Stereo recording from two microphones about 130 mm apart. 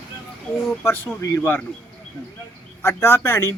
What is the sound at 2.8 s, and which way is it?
Speech, 15° left (ahead or behind).